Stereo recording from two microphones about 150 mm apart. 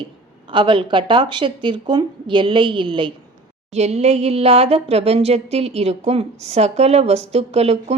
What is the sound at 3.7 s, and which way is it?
Speech, 45° right (ahead or behind).